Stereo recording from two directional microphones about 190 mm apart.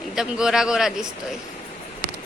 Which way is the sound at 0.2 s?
5° right (ahead or behind).